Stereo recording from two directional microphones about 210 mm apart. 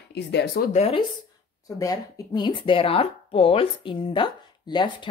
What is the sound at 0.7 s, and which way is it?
Speech, 30° left (ahead or behind).